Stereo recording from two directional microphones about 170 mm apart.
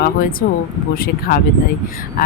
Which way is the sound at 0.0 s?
55° left (ahead or behind).